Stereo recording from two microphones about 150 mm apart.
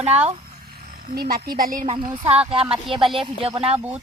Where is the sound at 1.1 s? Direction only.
85° right; by 1.9 s 65° right (ahead or behind).